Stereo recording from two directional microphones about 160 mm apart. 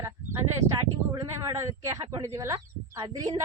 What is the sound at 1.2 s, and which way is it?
Speech, 20° right (ahead or behind).